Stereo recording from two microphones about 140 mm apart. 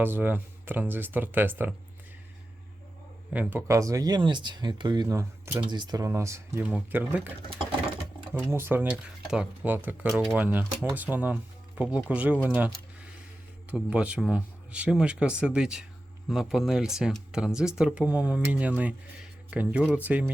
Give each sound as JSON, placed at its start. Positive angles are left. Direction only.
{"t": 0.0, "sound": "speech", "side_deg": -15}
{"t": 3.3, "sound": "speech", "side_deg": -10}
{"t": 3.7, "sound": "speech", "side_deg": -25}
{"t": 6.7, "sound": "speech", "side_deg": -10}
{"t": 8.4, "sound": "speech", "side_deg": -15}
{"t": 10.1, "sound": "speech", "side_deg": 0}
{"t": 10.3, "sound": "speech", "side_deg": -15}
{"t": 13.7, "sound": "speech", "side_deg": -10}